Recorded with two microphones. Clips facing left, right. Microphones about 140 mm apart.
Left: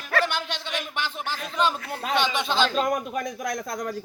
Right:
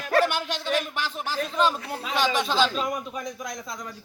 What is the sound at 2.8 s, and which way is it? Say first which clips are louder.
A man's voice: left 4 dB; 50° left (ahead or behind).